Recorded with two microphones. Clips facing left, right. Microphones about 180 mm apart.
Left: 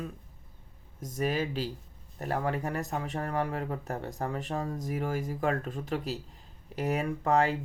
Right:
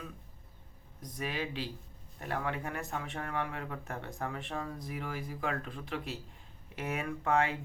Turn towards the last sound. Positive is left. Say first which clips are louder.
# left 4 dB
turn(degrees=35)  # may be behind; listen again after turning